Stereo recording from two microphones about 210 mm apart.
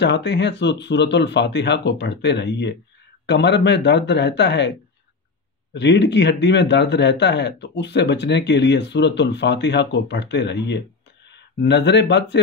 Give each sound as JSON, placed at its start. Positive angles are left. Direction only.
{"t": 0.0, "sound": "speech", "side_deg": 55}
{"t": 5.8, "sound": "speech", "side_deg": 55}